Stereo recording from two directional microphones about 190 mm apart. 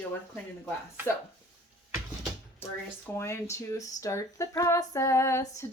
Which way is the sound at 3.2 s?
15° left (ahead or behind).